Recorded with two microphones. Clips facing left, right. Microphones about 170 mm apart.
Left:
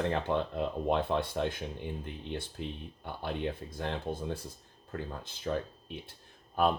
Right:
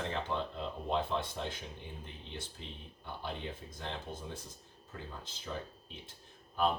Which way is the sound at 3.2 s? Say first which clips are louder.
Left 8 dB; 60° left (ahead or behind).